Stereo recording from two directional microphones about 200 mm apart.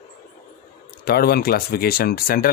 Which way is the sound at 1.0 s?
50° left (ahead or behind).